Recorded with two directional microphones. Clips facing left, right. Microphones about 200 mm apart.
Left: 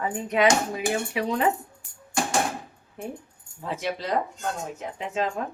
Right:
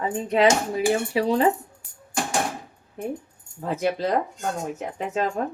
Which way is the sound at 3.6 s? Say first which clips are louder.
Right 5 dB; 45° right (ahead or behind).